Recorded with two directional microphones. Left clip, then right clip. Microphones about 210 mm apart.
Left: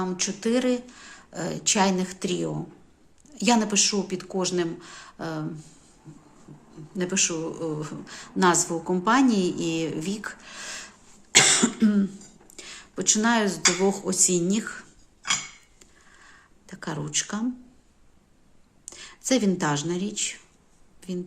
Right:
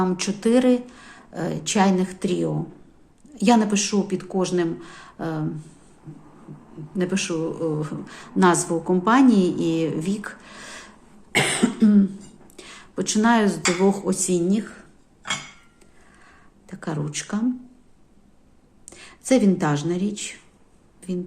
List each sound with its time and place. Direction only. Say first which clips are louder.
0.0 s speech: right 5 dB; 10° right (ahead or behind); by 5.5 s 5° left (ahead or behind)
6.9 s speech: right 1 dB; 5° left (ahead or behind)
11.3 s cough: left 2 dB; 25° left (ahead or behind)
11.8 s cough: right 5 dB; 15° left (ahead or behind)
12.5 s speech: right 4 dB; 5° left (ahead or behind); by 14.8 s 20° left (ahead or behind)
16.2 s a sound: right 1 dB; 10° left (ahead or behind)
18.9 s speech: right 4 dB; 10° left (ahead or behind)